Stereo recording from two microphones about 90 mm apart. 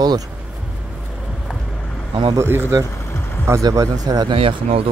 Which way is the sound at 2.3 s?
25° right (ahead or behind).